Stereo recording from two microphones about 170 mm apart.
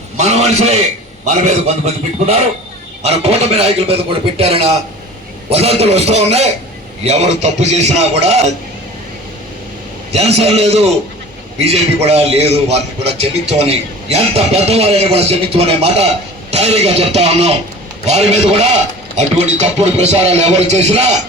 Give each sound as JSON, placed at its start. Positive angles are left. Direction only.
{"t": 0.2, "sound": "a man's voice", "side_deg": -40}
{"t": 10.1, "sound": "a man's voice", "side_deg": -40}